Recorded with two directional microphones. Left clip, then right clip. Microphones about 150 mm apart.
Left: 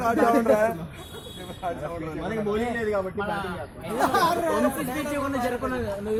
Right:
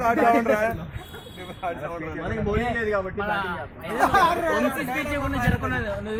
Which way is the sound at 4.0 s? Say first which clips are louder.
Right 3 dB; 20° left (ahead or behind).